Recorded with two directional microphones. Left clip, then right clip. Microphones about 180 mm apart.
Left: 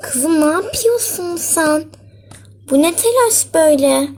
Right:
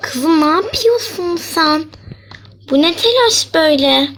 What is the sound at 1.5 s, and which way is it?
Speech, 30° right (ahead or behind).